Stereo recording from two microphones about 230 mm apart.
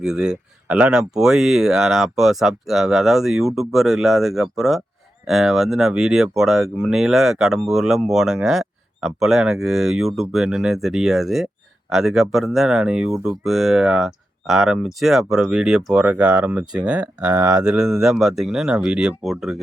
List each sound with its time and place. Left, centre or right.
0.0 s speech: centre
17.3 s speech: centre
17.7 s speech: centre